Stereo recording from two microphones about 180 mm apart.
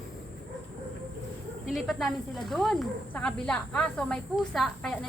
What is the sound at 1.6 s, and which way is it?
Speech, centre (ahead or behind).